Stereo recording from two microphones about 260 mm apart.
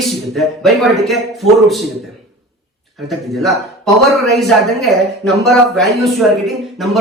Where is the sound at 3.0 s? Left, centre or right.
Centre.